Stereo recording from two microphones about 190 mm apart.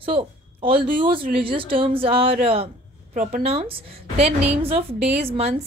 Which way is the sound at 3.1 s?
45° right (ahead or behind).